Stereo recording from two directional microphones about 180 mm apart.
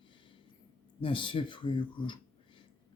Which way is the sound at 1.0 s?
30° left (ahead or behind).